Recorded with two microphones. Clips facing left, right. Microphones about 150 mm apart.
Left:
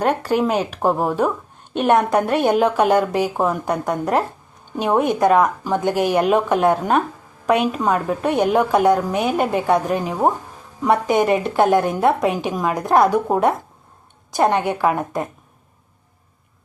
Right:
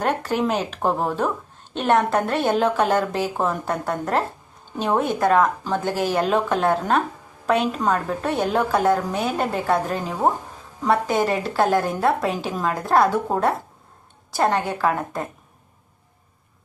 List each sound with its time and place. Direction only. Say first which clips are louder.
0.0 s a woman's voice: left 4 dB; 10° left (ahead or behind)